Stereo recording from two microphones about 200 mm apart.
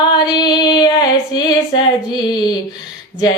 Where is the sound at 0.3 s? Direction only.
20° left (ahead or behind).